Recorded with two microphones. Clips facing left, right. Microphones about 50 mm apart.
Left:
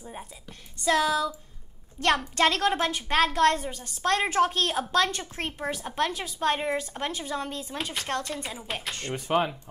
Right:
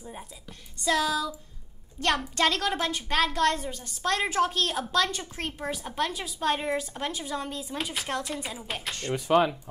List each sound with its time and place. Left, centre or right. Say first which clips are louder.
0.0 s a woman's voice: left 1 dB; centre
7.5 s a woman's voice: even; centre